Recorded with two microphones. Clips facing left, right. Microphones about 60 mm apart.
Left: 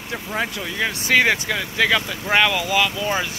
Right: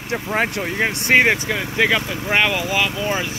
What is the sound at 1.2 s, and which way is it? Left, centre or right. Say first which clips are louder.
Speech: right 2 dB; centre.